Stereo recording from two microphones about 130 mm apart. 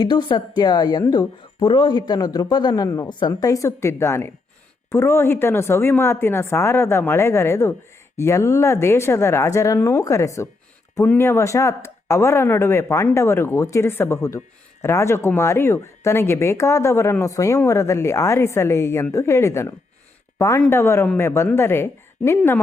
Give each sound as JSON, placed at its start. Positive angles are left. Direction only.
{"t": 0.0, "sound": "speech", "side_deg": 35}
{"t": 1.5, "sound": "speech", "side_deg": 40}